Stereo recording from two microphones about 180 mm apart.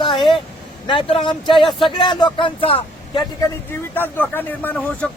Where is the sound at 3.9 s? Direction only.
10° left (ahead or behind).